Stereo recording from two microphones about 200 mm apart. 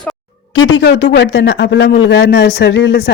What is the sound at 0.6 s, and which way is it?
Speech, 65° left (ahead or behind).